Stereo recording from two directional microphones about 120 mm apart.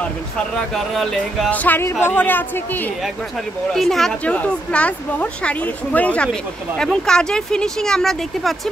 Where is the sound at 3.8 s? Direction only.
Centre (ahead or behind).